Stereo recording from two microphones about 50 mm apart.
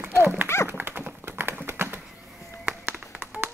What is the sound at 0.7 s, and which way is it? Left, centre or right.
Tap, right.